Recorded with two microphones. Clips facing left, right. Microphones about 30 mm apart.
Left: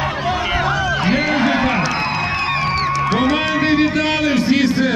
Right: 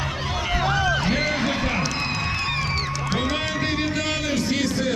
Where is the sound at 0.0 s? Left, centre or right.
Centre.